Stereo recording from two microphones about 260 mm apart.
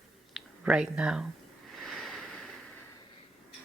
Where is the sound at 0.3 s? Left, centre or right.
Centre.